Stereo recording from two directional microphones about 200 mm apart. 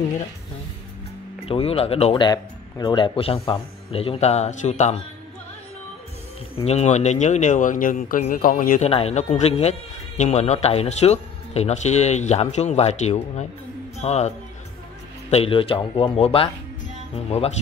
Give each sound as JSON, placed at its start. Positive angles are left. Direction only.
{"t": 1.4, "sound": "speech", "side_deg": 30}
{"t": 6.5, "sound": "speech", "side_deg": 30}
{"t": 15.3, "sound": "speech", "side_deg": 30}